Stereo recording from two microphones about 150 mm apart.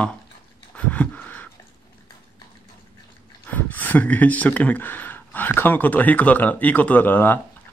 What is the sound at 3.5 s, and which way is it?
Speech, 10° left (ahead or behind).